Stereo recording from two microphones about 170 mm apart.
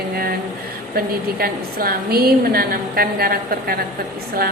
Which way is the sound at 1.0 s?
60° right (ahead or behind).